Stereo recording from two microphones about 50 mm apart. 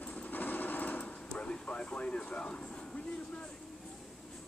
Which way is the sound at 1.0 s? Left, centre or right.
Left.